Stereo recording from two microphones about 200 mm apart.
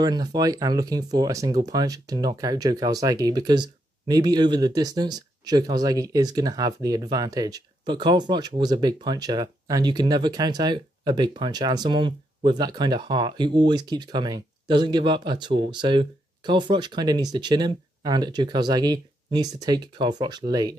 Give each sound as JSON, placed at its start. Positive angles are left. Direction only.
{"t": 0.0, "sound": "speech", "side_deg": -20}